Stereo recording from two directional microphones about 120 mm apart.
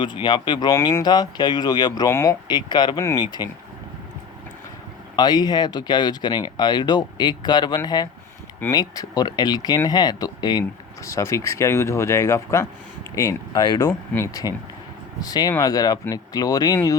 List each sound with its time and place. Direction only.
0.0 s speech: 40° left (ahead or behind)
0.7 s speech: 25° left (ahead or behind)
2.0 s speech: 25° left (ahead or behind)
2.5 s speech: 35° left (ahead or behind)
5.1 s speech: 35° left (ahead or behind)
10.6 s speech: 25° left (ahead or behind)